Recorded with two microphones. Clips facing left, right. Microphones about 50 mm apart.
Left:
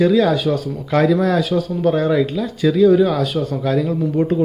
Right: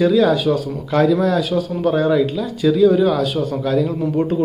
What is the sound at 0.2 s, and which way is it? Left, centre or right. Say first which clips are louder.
Speech: right 1 dB; centre.